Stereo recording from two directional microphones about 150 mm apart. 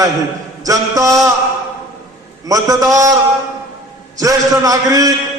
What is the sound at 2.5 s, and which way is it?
Speech, 25° right (ahead or behind).